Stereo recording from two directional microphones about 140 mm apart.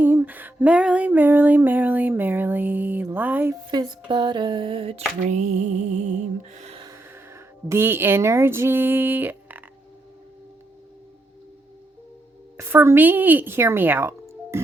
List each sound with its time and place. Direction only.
0.0 s female singing: 15° right (ahead or behind)
3.7 s a sound: 35° right (ahead or behind); by 6.7 s 55° right (ahead or behind)
6.9 s speech: 20° right (ahead or behind)
12.5 s speech: 20° right (ahead or behind)